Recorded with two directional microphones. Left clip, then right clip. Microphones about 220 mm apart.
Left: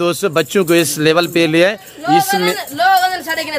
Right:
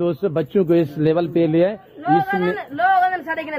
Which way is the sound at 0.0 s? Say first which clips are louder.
Left 6 dB; 10° left (ahead or behind).